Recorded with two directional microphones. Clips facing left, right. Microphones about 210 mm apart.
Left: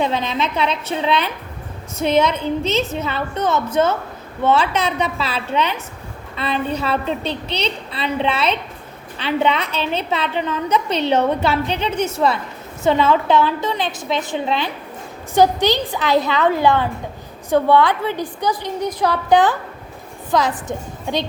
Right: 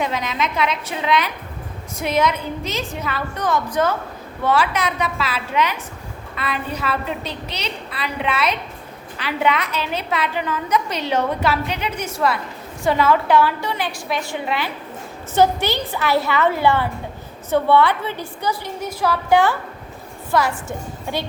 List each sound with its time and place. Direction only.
0.0 s a woman's voice: 30° left (ahead or behind)